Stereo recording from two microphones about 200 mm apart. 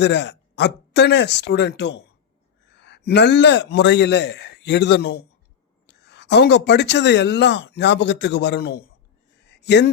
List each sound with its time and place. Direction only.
0.0 s speech: 60° left (ahead or behind)